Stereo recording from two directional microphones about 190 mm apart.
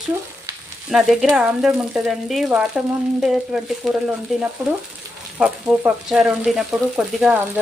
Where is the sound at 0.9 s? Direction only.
Centre (ahead or behind).